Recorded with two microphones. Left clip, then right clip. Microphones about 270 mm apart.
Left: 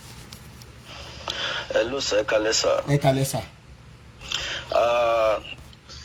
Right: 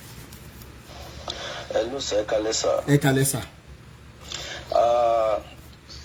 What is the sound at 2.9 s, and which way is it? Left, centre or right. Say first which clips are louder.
Speech: even; centre.